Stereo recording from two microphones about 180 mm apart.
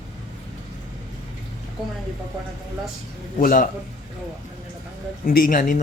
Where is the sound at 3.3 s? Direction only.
50° left (ahead or behind).